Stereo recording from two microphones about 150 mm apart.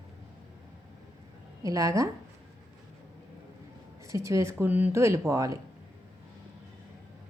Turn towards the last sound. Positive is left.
turn(degrees=-20)  # may be behind; listen again after turning